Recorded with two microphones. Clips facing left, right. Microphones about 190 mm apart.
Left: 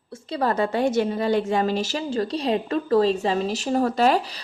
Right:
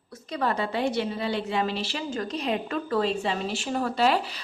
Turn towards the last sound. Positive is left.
turn(degrees=40)  # may be behind; listen again after turning